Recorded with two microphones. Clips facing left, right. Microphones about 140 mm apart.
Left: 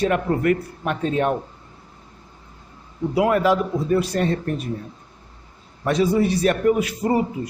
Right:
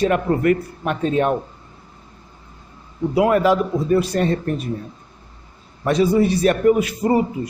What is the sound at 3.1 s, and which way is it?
A man's voice, 25° right (ahead or behind).